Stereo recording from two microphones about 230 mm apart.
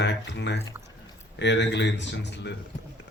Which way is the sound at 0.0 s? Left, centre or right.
Left.